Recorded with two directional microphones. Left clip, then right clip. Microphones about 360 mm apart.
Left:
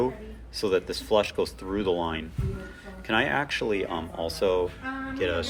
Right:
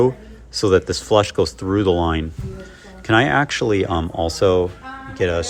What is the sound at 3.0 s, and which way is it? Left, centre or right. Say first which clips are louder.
Speech: right 9 dB; centre.